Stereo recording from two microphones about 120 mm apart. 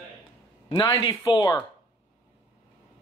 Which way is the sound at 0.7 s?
35° left (ahead or behind).